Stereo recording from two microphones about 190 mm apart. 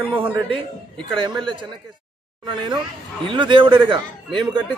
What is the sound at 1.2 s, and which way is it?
Speech, 25° right (ahead or behind).